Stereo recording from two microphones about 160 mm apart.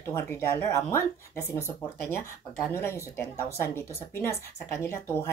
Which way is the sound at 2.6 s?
15° left (ahead or behind).